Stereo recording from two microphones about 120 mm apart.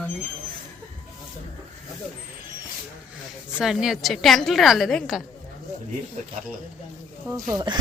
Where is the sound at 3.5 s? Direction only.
5° right (ahead or behind).